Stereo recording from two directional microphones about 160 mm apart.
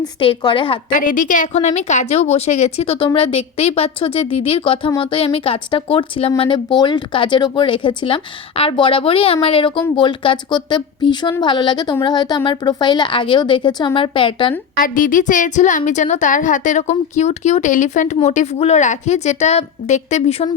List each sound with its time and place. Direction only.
0.2 s a woman's voice: 30° left (ahead or behind)
0.9 s a woman's voice: 55° left (ahead or behind); by 14.5 s 30° left (ahead or behind)
14.8 s a woman's voice: 60° left (ahead or behind); by 20.5 s 40° left (ahead or behind)